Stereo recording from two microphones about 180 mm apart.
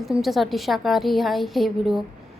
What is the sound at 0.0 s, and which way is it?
A woman's voice, centre (ahead or behind).